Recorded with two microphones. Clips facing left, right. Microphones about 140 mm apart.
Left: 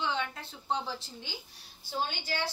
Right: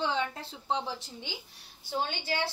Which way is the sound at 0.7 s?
20° right (ahead or behind).